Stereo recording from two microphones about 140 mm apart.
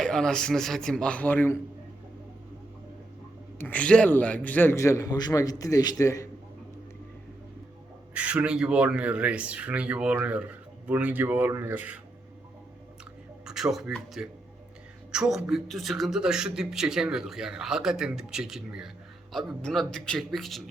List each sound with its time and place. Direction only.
0.0 s speech: 5° left (ahead or behind)
3.6 s a man's voice: 10° left (ahead or behind)
8.1 s speech: 10° right (ahead or behind)
13.4 s speech: 5° right (ahead or behind)